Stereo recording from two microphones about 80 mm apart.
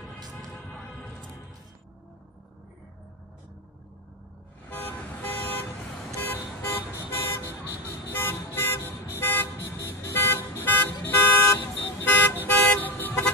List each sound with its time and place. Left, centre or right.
0.3 s music: centre
4.6 s vehicle: left
8.1 s toot: left